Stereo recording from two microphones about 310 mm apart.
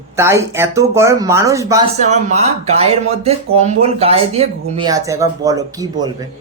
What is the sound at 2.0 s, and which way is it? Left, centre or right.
Speech, right.